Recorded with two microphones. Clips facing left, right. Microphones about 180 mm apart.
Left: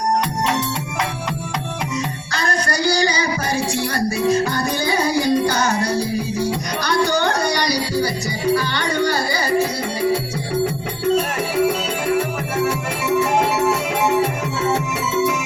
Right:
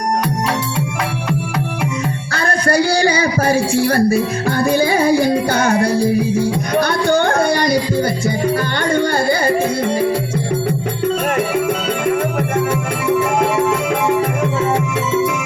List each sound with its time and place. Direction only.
2.3 s music: 55° right (ahead or behind)